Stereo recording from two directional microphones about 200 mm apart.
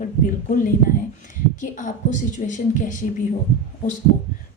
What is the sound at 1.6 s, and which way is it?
Speech, 40° left (ahead or behind).